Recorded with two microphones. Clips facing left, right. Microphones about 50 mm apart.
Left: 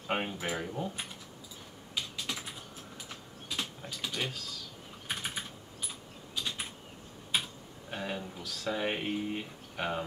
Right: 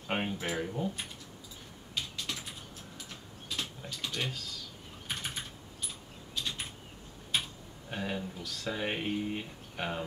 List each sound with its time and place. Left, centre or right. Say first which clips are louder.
0.0 s speech: even; centre
2.0 s typing: left 1 dB; centre
6.3 s a sound: even; centre
7.9 s speech: right 1 dB; centre